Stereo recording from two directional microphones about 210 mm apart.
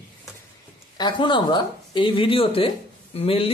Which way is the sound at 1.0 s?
20° left (ahead or behind).